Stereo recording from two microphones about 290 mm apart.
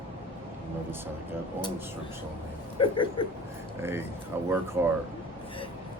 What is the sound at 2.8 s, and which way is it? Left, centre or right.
Speech, centre.